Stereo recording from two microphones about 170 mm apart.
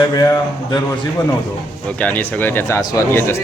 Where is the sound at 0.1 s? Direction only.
20° left (ahead or behind).